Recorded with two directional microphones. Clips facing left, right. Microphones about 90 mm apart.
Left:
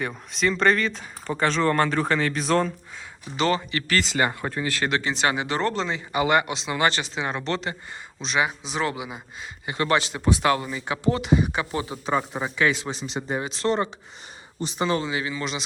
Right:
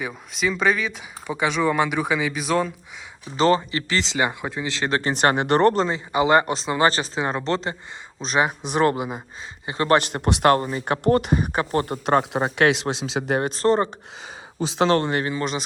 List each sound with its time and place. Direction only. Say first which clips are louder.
0.0 s speech: even; 5° right (ahead or behind)
3.3 s speech: right 5 dB; 35° right (ahead or behind)
4.9 s speech: right 5 dB; 35° right (ahead or behind)
5.1 s speech: right 6 dB; 55° right (ahead or behind)
6.1 s speech: right 3 dB; 25° right (ahead or behind); by 9.1 s 45° right (ahead or behind)
9.6 s speech: right 2 dB; 30° right (ahead or behind)
9.9 s speech: right 3 dB; 55° right (ahead or behind); by 13.5 s 70° right (ahead or behind)
13.5 s speech: right 4 dB; 40° right (ahead or behind)
14.8 s speech: right 5 dB; 75° right (ahead or behind); by 15.6 s 45° right (ahead or behind)